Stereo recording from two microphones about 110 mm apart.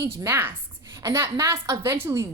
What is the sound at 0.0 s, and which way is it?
A woman's voice, 25° right (ahead or behind).